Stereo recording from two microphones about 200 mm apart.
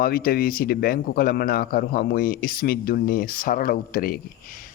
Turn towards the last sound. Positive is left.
turn(degrees=45)  # may be behind; listen again after turning